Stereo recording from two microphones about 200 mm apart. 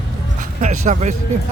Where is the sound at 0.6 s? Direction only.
40° right (ahead or behind).